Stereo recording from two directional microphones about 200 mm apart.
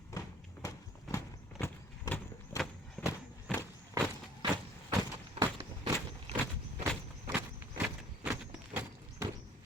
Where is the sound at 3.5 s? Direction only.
Centre (ahead or behind).